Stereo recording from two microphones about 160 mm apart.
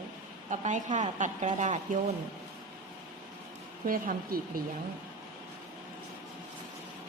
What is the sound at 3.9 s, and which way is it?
Speech, 65° right (ahead or behind).